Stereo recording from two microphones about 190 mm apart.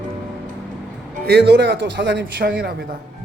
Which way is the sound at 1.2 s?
60° right (ahead or behind).